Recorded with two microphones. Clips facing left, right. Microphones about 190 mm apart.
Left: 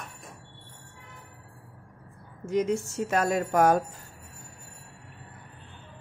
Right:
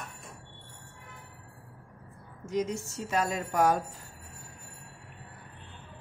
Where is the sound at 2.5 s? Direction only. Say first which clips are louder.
Left 5 dB; 55° left (ahead or behind).